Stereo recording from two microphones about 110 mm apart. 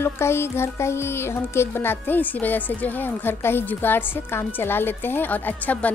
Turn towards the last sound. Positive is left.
turn(degrees=15)  # may be behind; listen again after turning